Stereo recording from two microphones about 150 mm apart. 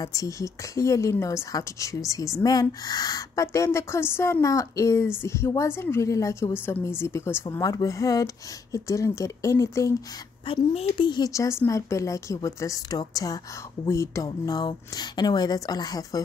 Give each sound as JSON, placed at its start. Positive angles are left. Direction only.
{"t": 0.0, "sound": "a woman's voice", "side_deg": 25}
{"t": 10.4, "sound": "a woman's voice", "side_deg": 40}